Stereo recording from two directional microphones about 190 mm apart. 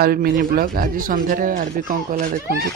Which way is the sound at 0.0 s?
55° right (ahead or behind).